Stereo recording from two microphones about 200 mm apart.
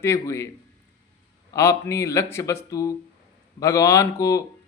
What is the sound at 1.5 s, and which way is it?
A man's voice, 15° left (ahead or behind).